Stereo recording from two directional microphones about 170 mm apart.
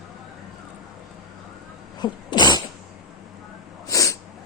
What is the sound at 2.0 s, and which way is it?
Cat, 25° left (ahead or behind).